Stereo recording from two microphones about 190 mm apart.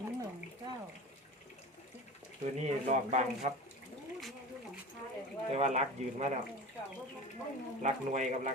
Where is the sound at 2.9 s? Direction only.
35° right (ahead or behind).